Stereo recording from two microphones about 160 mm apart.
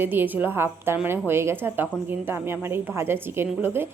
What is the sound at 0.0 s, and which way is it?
A woman's voice, 15° right (ahead or behind).